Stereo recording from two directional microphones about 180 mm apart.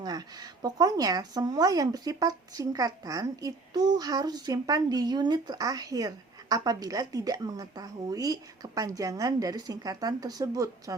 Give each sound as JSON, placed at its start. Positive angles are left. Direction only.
{"t": 0.0, "sound": "speech", "side_deg": -20}